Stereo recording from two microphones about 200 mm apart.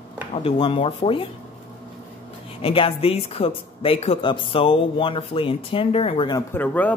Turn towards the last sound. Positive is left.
turn(degrees=10)  # may be behind; listen again after turning